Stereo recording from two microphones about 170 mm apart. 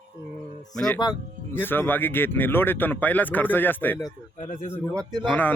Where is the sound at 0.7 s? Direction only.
5° left (ahead or behind).